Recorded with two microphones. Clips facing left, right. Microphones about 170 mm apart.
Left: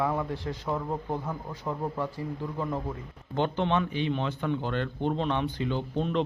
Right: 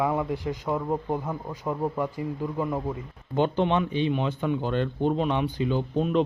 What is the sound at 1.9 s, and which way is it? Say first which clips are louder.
A man's voice: right 4 dB; 15° right (ahead or behind).